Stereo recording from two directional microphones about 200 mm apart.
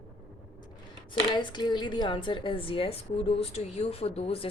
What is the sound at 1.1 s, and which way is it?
A woman's voice, 25° left (ahead or behind).